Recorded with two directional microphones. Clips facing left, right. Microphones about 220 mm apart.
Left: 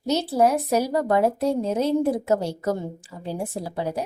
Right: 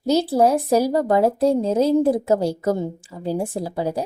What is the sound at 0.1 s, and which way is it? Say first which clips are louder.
A woman's voice: right 3 dB; 30° right (ahead or behind).